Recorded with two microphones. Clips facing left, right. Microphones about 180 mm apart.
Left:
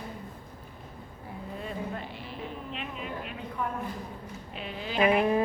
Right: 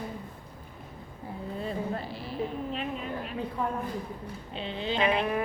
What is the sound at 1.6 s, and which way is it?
Music, 35° right (ahead or behind).